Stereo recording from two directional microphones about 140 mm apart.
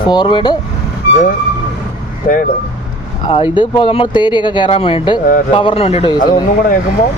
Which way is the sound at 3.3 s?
35° left (ahead or behind).